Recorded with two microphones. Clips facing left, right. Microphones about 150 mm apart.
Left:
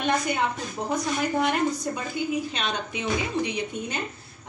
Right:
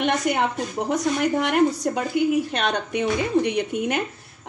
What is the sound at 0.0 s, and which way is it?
A woman's voice, 75° right (ahead or behind).